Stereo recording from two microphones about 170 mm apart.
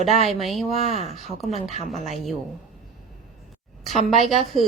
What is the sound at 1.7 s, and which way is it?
Speech, 40° left (ahead or behind).